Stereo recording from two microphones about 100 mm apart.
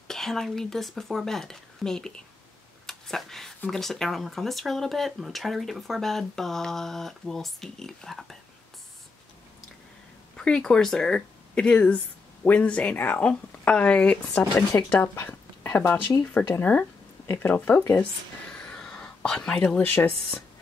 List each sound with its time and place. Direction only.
0.1 s speech: 5° left (ahead or behind)
10.3 s speech: 10° left (ahead or behind)
15.1 s a sound: 20° left (ahead or behind)
16.4 s speech: 20° left (ahead or behind)
18.5 s whispering: 5° left (ahead or behind)
19.8 s speech: 20° left (ahead or behind)